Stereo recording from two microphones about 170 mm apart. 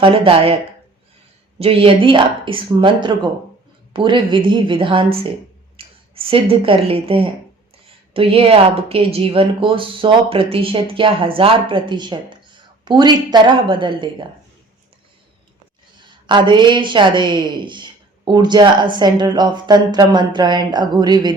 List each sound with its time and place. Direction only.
0.0 s speech: 30° right (ahead or behind)
1.5 s a woman's voice: 35° right (ahead or behind)
16.2 s a woman's voice: 25° right (ahead or behind)